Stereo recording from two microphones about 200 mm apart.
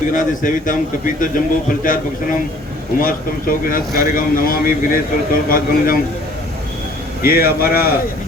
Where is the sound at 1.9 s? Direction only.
40° left (ahead or behind).